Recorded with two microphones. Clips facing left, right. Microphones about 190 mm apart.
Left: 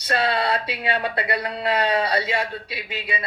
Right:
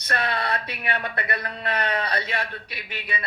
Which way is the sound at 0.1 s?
30° left (ahead or behind).